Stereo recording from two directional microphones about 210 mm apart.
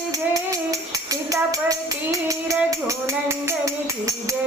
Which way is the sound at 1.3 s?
15° right (ahead or behind).